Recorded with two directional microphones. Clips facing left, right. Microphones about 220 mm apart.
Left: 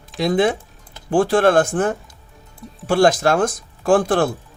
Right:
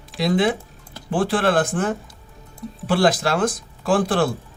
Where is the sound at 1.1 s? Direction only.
45° left (ahead or behind).